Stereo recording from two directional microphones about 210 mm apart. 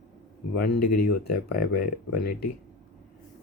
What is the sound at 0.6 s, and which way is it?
Speech, 45° left (ahead or behind).